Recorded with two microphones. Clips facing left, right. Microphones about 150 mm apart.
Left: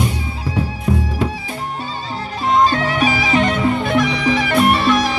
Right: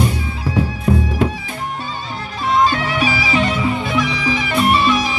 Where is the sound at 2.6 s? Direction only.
40° left (ahead or behind).